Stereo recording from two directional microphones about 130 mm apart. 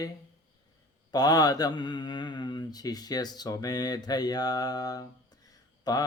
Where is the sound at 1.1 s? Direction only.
30° left (ahead or behind).